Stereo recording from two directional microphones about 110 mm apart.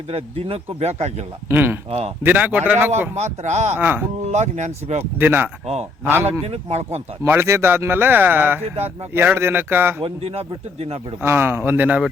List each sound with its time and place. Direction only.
0.1 s speech: 65° right (ahead or behind)
1.5 s a man's voice: 20° right (ahead or behind)
1.9 s speech: 70° right (ahead or behind)
2.2 s speech: 15° right (ahead or behind)
3.2 s speech: 90° right
3.8 s speech: 15° right (ahead or behind)
4.2 s speech: 90° right
5.2 s a man's voice: 20° right (ahead or behind)
6.4 s speech: 75° right (ahead or behind)
7.3 s a man's voice: 25° right (ahead or behind)
10.0 s speech: 65° right (ahead or behind)
11.2 s speech: 20° right (ahead or behind)